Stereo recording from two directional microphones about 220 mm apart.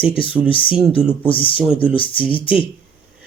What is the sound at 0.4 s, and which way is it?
Speech, 25° left (ahead or behind).